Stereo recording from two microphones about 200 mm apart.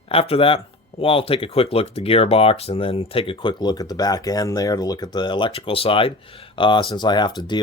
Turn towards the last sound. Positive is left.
turn(degrees=20)  # may be behind; listen again after turning